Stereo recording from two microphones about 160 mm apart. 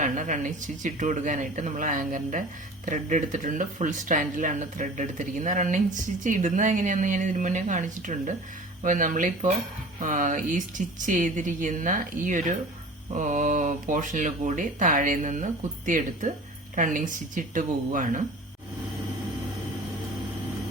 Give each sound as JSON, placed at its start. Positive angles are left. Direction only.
{"t": 0.0, "sound": "speech", "side_deg": -50}